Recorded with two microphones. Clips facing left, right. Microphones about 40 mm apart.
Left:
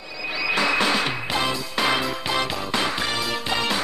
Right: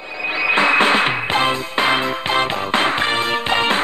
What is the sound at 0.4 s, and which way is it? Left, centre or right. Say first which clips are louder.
Music: right 7 dB; right.